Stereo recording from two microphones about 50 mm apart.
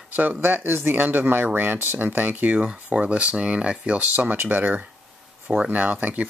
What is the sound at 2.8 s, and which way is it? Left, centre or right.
Speech, right.